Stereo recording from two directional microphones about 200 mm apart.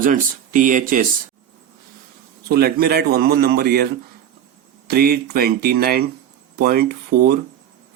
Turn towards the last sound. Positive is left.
turn(degrees=-50)  # may be behind; listen again after turning